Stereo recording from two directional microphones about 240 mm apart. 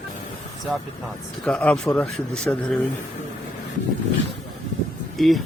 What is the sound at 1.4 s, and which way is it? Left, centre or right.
Speech, centre.